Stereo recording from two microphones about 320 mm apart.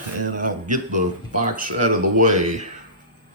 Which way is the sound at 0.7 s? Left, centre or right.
Right.